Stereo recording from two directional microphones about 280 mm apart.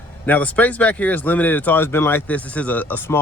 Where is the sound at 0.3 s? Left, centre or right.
Centre.